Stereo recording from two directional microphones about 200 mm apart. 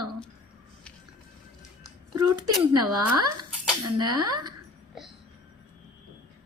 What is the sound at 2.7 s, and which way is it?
Speech, 20° right (ahead or behind).